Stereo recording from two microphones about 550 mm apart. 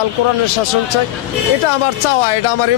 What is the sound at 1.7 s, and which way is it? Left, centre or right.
A man's voice, left.